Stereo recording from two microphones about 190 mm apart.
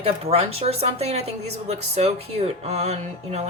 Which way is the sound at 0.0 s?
30° right (ahead or behind).